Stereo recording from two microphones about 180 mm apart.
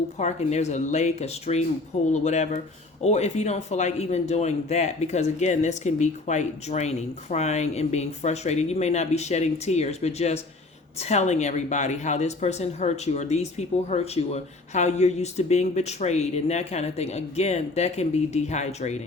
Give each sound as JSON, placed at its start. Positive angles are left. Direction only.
{"t": 0.2, "sound": "speech", "side_deg": 40}